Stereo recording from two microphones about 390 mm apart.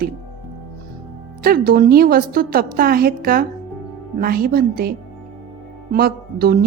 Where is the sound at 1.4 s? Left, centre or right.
Right.